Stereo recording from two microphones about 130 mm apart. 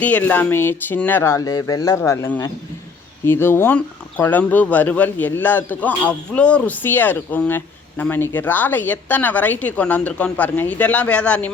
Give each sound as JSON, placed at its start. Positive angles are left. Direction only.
{"t": 0.0, "sound": "speech", "side_deg": 10}